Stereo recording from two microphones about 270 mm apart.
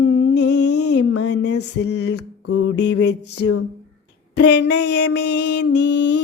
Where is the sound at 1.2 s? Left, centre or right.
Left.